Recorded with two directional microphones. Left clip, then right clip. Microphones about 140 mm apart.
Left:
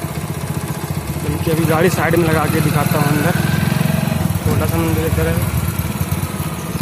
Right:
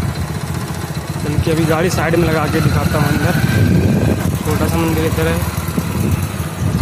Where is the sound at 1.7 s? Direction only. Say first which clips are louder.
Left 2 dB; 20° right (ahead or behind).